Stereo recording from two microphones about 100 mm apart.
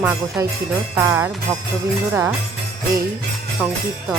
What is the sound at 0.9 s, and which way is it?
Speech, 25° right (ahead or behind).